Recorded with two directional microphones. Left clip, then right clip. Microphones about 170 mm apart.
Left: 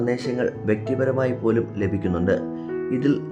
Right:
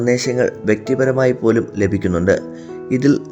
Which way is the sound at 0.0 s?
25° right (ahead or behind).